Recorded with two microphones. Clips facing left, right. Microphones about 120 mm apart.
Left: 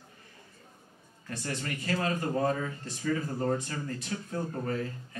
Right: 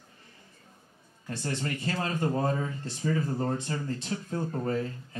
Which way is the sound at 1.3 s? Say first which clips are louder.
Right 3 dB; 30° right (ahead or behind).